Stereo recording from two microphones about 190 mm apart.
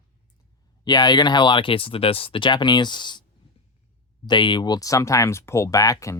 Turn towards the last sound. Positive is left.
turn(degrees=15)  # may be behind; listen again after turning